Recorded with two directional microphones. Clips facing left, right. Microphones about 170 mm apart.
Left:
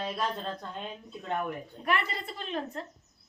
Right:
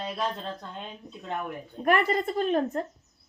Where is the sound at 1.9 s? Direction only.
45° right (ahead or behind).